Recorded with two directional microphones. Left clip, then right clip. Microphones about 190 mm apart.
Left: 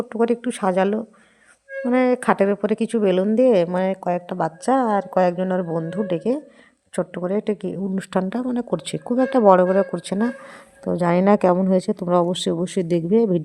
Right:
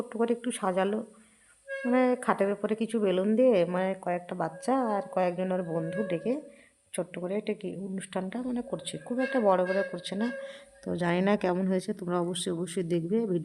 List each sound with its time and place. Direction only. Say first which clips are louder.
0.1 s a woman's voice: left 8 dB; 25° left (ahead or behind)
10.8 s speech: left 10 dB; 15° left (ahead or behind)
11.5 s speech: left 11 dB; 10° left (ahead or behind)
11.8 s a woman's voice: left 12 dB; 25° left (ahead or behind)